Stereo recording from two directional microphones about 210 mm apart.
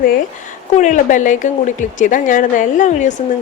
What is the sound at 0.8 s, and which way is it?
Speech, 35° left (ahead or behind).